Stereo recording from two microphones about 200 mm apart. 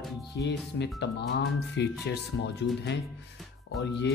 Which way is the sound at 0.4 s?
55° left (ahead or behind).